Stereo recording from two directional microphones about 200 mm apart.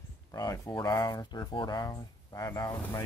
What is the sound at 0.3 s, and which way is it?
Speech, 15° left (ahead or behind).